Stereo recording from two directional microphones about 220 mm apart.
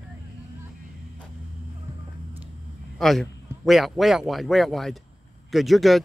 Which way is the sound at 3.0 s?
Centre (ahead or behind).